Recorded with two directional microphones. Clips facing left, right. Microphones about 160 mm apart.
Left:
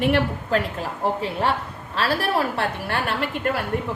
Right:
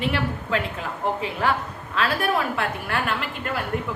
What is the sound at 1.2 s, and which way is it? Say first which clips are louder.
A woman's voice: left 1 dB; 30° left (ahead or behind).